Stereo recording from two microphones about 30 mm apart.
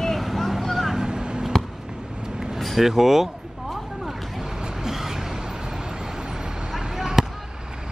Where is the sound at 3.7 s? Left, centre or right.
Centre.